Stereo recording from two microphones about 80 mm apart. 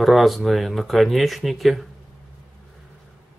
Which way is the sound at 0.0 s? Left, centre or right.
Centre.